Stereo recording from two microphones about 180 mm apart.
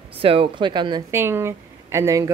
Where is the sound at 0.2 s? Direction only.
30° right (ahead or behind).